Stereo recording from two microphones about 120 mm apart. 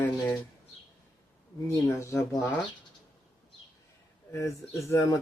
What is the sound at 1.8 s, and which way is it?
Speech, 25° left (ahead or behind).